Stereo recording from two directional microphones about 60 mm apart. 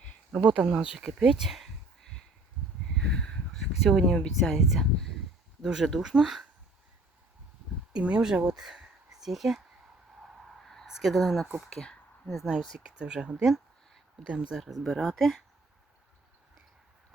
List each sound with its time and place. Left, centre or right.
0.3 s speech: right
0.6 s speech: centre
2.9 s a sound: centre
4.4 s speech: centre
5.6 s speech: centre
7.9 s speech: centre
10.8 s speech: centre
11.7 s a sound: centre
13.0 s speech: centre
14.6 s speech: centre